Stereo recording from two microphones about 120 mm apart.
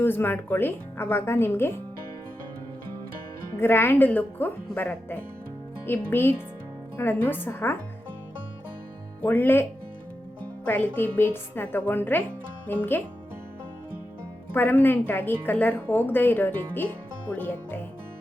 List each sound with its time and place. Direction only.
0.0 s speech: 20° left (ahead or behind)
3.6 s a woman's voice: 20° left (ahead or behind)
9.2 s a woman's voice: 15° left (ahead or behind)
14.5 s a woman's voice: 15° left (ahead or behind)